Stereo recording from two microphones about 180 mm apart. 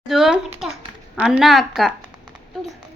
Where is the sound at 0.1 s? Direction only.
Centre (ahead or behind).